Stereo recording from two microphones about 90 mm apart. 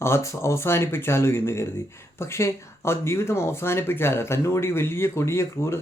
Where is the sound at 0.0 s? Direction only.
30° left (ahead or behind).